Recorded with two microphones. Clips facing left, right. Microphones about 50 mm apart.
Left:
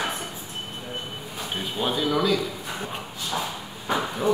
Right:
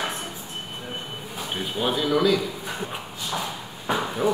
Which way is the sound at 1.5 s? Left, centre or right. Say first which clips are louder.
Right 1 dB; centre.